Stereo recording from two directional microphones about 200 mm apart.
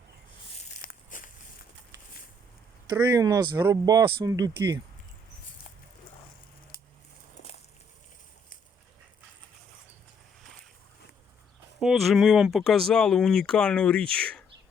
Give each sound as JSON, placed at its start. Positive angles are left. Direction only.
{"t": 0.8, "sound": "a sound", "side_deg": 45}
{"t": 2.9, "sound": "speech", "side_deg": -20}
{"t": 11.8, "sound": "speech", "side_deg": 0}